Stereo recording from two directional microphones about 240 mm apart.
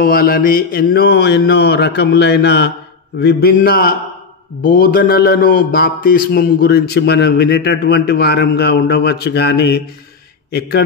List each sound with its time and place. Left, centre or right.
0.0 s mantra: left
3.2 s a man's voice: left